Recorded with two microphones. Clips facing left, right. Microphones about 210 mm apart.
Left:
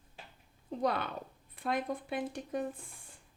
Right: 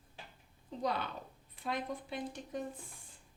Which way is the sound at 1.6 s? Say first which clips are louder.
Left 4 dB; 55° left (ahead or behind).